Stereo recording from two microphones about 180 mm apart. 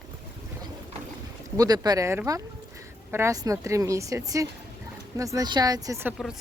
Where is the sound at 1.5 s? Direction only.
20° right (ahead or behind).